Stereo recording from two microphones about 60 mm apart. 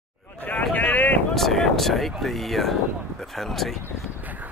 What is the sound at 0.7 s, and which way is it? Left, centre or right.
Wind noise, left.